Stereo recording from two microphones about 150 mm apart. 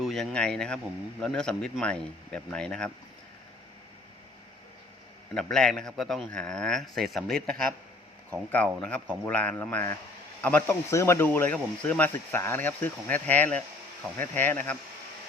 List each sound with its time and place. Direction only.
0.0 s a man's voice: centre (ahead or behind)
5.3 s a man's voice: 5° left (ahead or behind)